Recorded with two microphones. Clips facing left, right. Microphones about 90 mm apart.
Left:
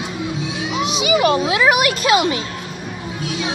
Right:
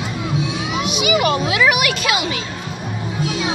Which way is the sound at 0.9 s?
30° left (ahead or behind).